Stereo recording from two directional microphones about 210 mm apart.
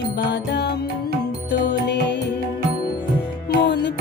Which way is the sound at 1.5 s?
55° left (ahead or behind).